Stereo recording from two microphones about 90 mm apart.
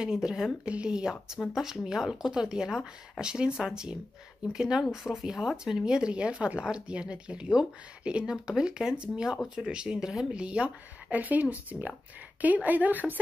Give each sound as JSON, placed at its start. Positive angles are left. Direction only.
{"t": 0.0, "sound": "speech", "side_deg": -10}